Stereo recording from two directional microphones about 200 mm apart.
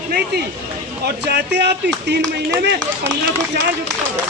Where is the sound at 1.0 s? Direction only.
55° right (ahead or behind).